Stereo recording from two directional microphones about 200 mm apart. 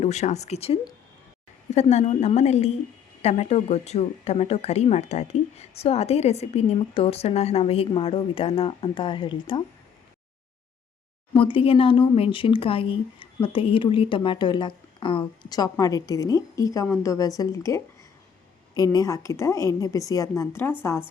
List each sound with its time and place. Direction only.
0.0 s speech: 35° left (ahead or behind)
11.3 s a woman's voice: 25° left (ahead or behind)